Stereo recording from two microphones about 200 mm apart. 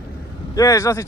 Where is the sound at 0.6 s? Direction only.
15° left (ahead or behind).